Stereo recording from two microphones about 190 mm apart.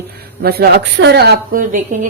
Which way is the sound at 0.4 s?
55° right (ahead or behind).